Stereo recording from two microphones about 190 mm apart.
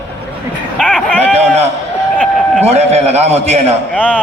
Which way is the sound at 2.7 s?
35° right (ahead or behind).